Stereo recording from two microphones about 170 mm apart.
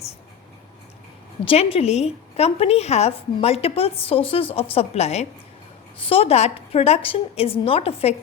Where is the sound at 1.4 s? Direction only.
35° left (ahead or behind).